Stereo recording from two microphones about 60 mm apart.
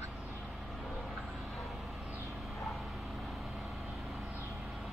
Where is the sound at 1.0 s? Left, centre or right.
Centre.